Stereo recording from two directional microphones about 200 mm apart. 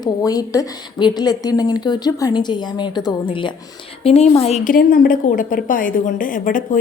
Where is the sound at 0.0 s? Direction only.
20° left (ahead or behind).